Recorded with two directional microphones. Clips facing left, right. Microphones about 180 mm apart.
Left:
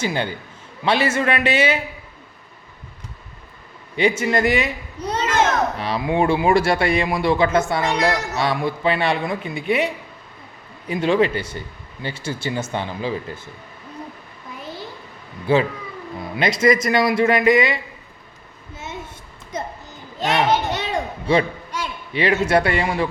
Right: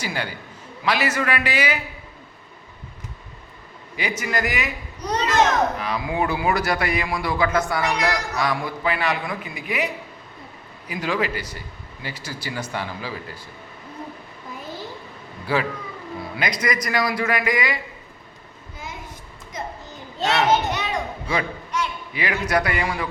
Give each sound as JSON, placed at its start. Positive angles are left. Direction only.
{"t": 0.0, "sound": "a man's voice", "side_deg": 25}
{"t": 3.9, "sound": "a man's voice", "side_deg": 25}
{"t": 15.5, "sound": "a man's voice", "side_deg": 25}
{"t": 20.7, "sound": "a sound", "side_deg": 30}